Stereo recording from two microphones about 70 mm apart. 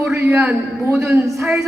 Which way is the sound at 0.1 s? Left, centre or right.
Right.